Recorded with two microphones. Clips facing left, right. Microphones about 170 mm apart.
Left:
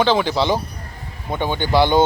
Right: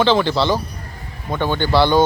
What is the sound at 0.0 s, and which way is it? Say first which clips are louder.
A man's voice: right 1 dB; 10° left (ahead or behind).